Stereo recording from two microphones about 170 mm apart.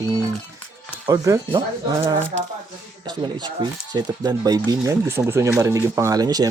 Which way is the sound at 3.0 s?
25° right (ahead or behind).